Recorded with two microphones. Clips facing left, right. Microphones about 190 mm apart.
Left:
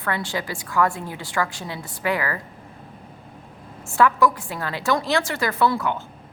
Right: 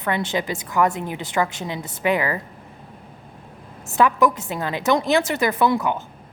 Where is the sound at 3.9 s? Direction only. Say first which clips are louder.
Right 1 dB; 20° right (ahead or behind).